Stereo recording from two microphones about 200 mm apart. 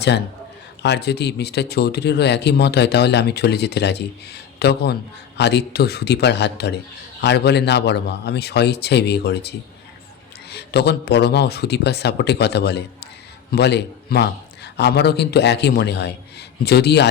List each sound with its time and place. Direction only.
0.8 s speech: 55° left (ahead or behind)